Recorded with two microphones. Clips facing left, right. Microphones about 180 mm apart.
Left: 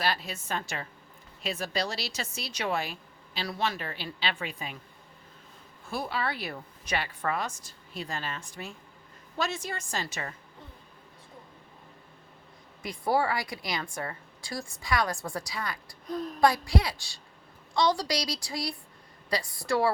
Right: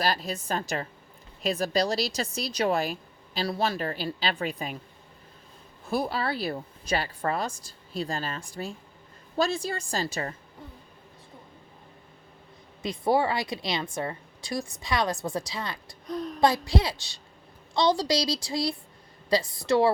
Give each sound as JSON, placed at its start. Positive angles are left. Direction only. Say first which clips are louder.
{"t": 0.0, "sound": "speech", "louder": "right 3 dB", "side_deg": -40}
{"t": 5.9, "sound": "speech", "louder": "right 4 dB", "side_deg": -40}
{"t": 12.8, "sound": "a woman's voice", "louder": "right 3 dB", "side_deg": -20}